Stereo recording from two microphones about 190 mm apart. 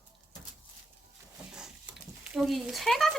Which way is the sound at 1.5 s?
5° right (ahead or behind).